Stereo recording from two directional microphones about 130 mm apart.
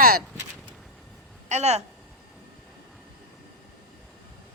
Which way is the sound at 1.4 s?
60° right (ahead or behind).